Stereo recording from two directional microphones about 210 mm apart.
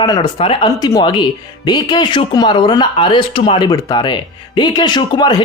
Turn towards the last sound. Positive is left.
turn(degrees=20)  # may be behind; listen again after turning